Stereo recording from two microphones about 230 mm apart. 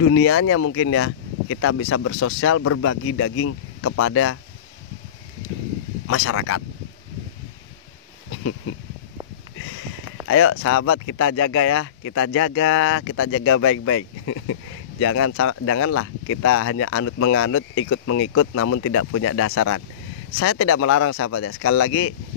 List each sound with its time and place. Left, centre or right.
0.0 s speech: left
6.0 s speech: left
10.2 s speech: left